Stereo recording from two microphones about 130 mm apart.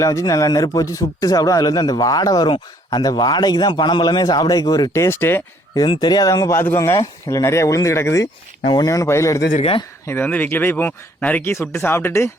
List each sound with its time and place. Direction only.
0.0 s a man's voice: 25° left (ahead or behind)
5.8 s a man's voice: 35° left (ahead or behind); by 12.3 s 20° left (ahead or behind)